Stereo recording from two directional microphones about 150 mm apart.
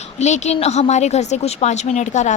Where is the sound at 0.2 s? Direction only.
50° left (ahead or behind).